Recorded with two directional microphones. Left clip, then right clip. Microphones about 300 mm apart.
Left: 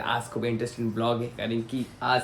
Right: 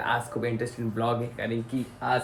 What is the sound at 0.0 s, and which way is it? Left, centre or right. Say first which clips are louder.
Speech: right 1 dB; centre.